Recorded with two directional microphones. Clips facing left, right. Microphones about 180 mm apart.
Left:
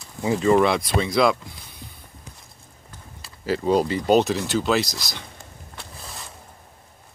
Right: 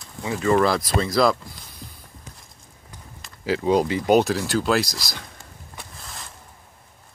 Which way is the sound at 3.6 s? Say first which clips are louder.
Even; 15° right (ahead or behind).